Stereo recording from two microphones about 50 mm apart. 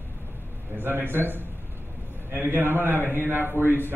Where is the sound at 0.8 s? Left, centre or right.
Right.